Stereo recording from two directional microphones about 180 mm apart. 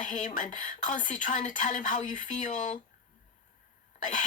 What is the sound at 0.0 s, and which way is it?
Speech, 45° left (ahead or behind).